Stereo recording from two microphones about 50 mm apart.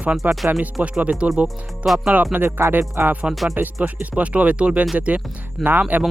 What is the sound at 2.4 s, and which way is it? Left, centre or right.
Speech, right.